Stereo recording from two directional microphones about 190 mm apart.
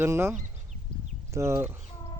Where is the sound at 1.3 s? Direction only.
15° right (ahead or behind).